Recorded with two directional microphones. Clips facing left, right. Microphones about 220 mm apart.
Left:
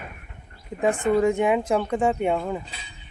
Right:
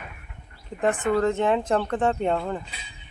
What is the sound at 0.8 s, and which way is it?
Speech, 10° left (ahead or behind).